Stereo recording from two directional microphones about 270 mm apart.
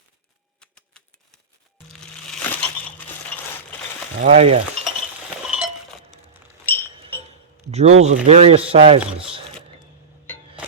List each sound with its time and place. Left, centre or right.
0.6 s typewriter: centre
1.9 s music: centre
4.2 s speech: right
5.5 s chink: centre
6.7 s music: centre
7.3 s a sound: right
8.0 s speech: right